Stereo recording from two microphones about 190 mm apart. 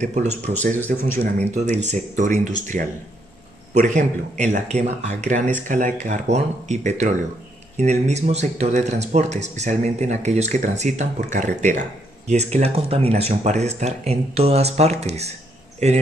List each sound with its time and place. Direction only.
0.0 s speech: 40° right (ahead or behind)
0.7 s speech: 10° left (ahead or behind)
1.5 s speech: 35° right (ahead or behind)
3.8 s speech: 40° right (ahead or behind)